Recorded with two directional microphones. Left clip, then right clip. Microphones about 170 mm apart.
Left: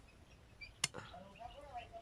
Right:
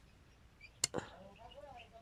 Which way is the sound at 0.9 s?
40° right (ahead or behind).